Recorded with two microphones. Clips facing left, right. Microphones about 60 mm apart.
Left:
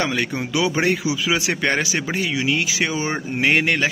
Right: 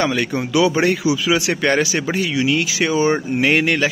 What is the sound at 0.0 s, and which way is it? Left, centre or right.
A man's voice, centre.